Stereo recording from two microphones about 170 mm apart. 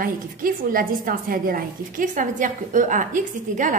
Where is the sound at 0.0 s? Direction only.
55° right (ahead or behind).